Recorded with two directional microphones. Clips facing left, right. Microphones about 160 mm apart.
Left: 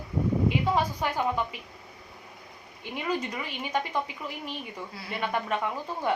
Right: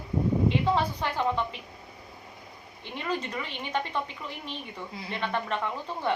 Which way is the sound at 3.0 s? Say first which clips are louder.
Left 1 dB; 10° left (ahead or behind).